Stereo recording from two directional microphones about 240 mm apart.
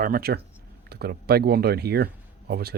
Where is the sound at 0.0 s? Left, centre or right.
Right.